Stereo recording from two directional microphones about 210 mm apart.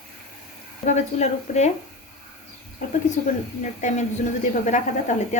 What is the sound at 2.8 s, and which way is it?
Speech, 35° left (ahead or behind).